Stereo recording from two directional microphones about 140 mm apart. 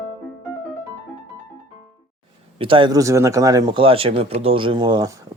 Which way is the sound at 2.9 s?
25° right (ahead or behind).